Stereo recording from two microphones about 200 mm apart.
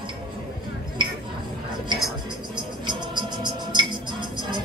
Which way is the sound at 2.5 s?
20° right (ahead or behind).